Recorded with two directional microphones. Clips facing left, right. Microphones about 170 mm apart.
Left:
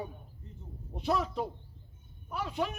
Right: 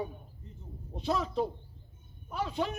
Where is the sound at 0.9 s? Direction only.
25° right (ahead or behind).